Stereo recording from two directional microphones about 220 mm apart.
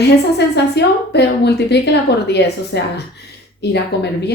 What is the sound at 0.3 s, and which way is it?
A woman's voice, 50° left (ahead or behind).